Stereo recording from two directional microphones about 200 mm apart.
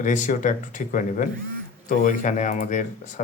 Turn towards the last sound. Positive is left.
turn(degrees=35)  # may be behind; listen again after turning